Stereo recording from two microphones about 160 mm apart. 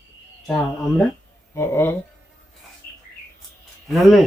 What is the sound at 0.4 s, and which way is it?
Speech, centre (ahead or behind).